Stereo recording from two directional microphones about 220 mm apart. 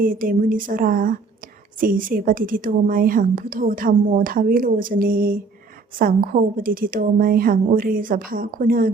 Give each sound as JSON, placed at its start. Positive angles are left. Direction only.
{"t": 0.0, "sound": "a woman's voice", "side_deg": -40}